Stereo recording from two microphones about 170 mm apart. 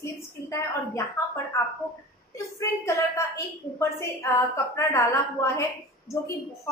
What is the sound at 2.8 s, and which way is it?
Speech, 15° left (ahead or behind).